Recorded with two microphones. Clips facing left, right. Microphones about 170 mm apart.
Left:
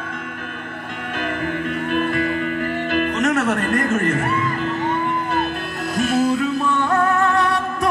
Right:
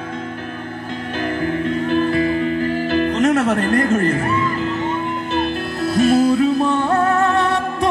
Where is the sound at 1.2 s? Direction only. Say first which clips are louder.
Right 4 dB; 30° right (ahead or behind).